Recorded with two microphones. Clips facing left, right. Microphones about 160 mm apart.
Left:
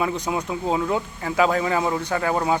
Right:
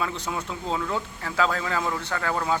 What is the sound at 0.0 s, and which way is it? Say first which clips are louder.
Speech: left 5 dB; 15° left (ahead or behind).